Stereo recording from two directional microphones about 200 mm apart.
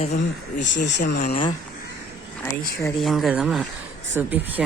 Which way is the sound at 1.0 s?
45° left (ahead or behind).